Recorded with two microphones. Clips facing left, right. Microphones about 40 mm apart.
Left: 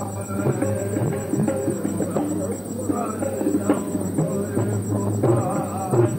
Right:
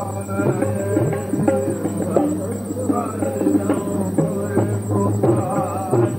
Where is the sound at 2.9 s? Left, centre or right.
Centre.